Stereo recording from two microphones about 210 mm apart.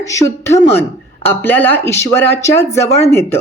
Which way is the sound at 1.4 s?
10° left (ahead or behind).